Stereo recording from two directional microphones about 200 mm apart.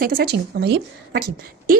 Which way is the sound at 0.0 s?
50° right (ahead or behind).